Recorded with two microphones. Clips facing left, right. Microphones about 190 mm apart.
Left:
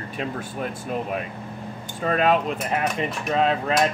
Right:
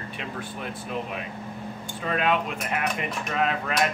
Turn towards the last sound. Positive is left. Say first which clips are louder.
# left 4 dB
turn(degrees=30)  # may be behind; listen again after turning